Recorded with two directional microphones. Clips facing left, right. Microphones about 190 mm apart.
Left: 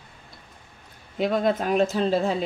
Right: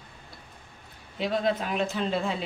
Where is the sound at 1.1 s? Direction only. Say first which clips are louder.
Left 4 dB; 50° left (ahead or behind).